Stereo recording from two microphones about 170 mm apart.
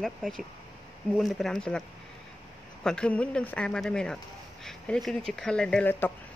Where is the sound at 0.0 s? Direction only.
Centre (ahead or behind).